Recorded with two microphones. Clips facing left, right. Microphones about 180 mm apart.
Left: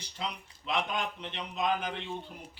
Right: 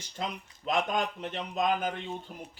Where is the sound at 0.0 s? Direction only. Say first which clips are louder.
Right 2 dB; 45° right (ahead or behind).